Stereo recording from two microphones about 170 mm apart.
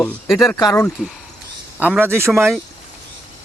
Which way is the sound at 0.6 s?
20° left (ahead or behind).